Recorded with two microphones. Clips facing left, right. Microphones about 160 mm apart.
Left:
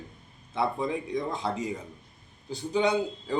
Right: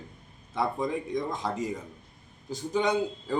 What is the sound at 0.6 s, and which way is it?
Speech, 5° left (ahead or behind).